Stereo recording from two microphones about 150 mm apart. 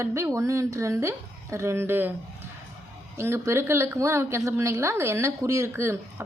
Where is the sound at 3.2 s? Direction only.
15° right (ahead or behind).